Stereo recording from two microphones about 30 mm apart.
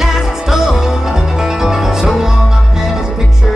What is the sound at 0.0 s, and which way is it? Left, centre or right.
Music, centre.